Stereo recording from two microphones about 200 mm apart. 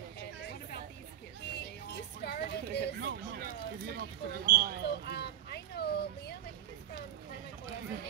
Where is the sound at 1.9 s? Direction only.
55° left (ahead or behind).